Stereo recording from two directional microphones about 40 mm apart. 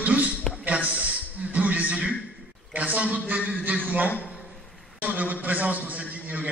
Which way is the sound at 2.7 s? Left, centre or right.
Right.